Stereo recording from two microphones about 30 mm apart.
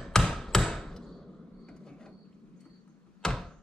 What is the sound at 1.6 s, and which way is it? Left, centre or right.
Mechanisms, left.